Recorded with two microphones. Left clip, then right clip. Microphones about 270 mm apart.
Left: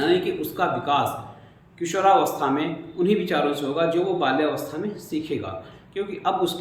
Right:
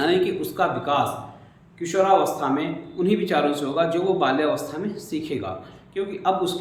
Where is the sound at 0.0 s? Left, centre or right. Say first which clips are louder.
Right 1 dB; centre.